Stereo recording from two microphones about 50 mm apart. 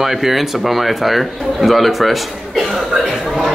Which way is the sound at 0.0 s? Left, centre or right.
Centre.